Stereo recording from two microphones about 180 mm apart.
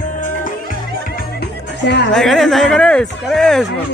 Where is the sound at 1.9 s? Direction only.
75° left (ahead or behind).